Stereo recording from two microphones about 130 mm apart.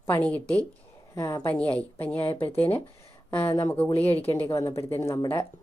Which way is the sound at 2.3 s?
45° left (ahead or behind).